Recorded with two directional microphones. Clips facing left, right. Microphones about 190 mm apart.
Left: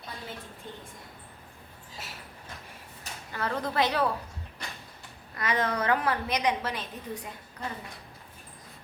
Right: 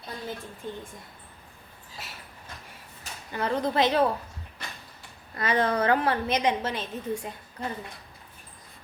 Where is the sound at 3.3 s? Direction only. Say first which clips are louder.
Right 5 dB; 20° right (ahead or behind).